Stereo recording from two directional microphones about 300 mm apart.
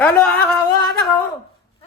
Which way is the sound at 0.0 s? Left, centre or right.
Centre.